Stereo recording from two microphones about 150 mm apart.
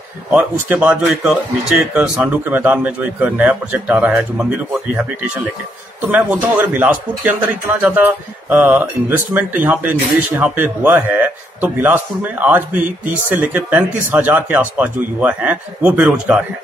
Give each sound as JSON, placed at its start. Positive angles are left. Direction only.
{"t": 0.3, "sound": "speech", "side_deg": -10}